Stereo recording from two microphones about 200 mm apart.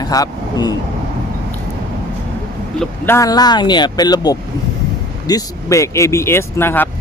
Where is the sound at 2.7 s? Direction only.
10° left (ahead or behind).